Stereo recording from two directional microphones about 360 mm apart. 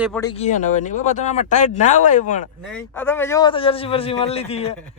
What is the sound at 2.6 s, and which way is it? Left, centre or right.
A man's voice, centre.